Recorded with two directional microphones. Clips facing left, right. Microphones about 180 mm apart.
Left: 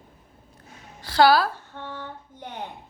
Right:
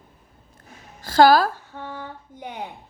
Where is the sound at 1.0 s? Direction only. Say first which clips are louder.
Right 3 dB; 45° right (ahead or behind).